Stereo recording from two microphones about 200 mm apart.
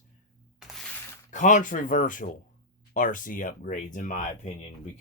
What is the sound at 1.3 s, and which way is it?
Speech, 40° left (ahead or behind).